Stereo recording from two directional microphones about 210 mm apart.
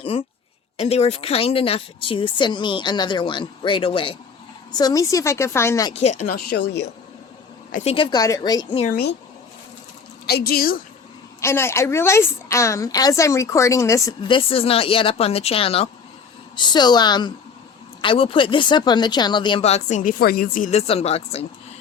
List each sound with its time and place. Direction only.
0.0 s a woman's voice: 25° left (ahead or behind)
5.9 s speech: 35° left (ahead or behind); by 6.9 s 50° left (ahead or behind)
7.9 s a woman's voice: 25° left (ahead or behind)
8.9 s speech: 50° left (ahead or behind)
10.2 s speech: 50° left (ahead or behind)
11.3 s a woman's voice: 10° left (ahead or behind); by 21.2 s 30° left (ahead or behind)